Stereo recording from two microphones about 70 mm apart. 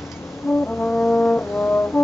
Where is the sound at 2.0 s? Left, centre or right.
Centre.